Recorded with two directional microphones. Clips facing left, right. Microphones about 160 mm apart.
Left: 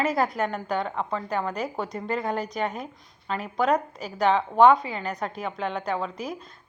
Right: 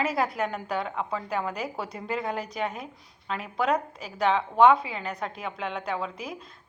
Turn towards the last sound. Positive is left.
turn(degrees=0)  # may be behind; listen again after turning